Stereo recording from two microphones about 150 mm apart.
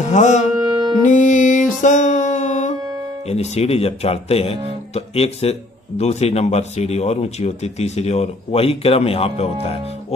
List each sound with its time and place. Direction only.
0.0 s music: 55° left (ahead or behind)
0.6 s music: 25° right (ahead or behind)
1.0 s music: 55° left (ahead or behind)
3.3 s a man's voice: 45° left (ahead or behind)